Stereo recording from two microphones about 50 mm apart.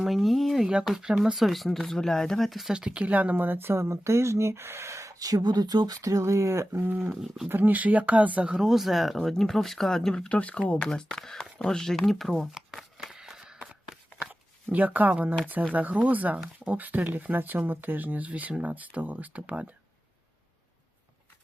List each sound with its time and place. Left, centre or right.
0.0 s speech: centre
0.9 s speech: centre
2.5 s speech: centre
2.7 s speech: right
7.1 s speech: centre
7.4 s speech: right
8.6 s speech: centre
10.2 s speech: left
10.8 s speech: centre
12.7 s a sound: centre
13.1 s walk: centre
14.7 s speech: right